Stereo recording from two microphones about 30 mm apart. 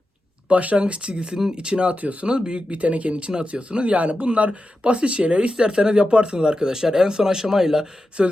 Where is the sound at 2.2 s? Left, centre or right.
Right.